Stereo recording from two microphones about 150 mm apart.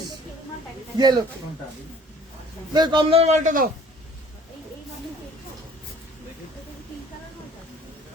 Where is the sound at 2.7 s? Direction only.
30° right (ahead or behind); by 3.7 s 65° right (ahead or behind).